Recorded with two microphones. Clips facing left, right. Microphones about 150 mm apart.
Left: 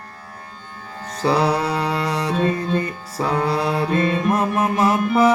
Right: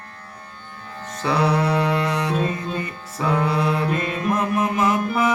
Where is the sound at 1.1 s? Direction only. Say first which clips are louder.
Left 2 dB; 35° left (ahead or behind).